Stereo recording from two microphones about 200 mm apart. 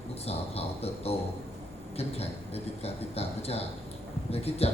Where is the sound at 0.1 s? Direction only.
30° left (ahead or behind).